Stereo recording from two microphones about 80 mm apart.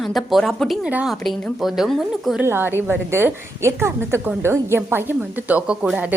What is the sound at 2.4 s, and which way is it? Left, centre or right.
A woman's voice, right.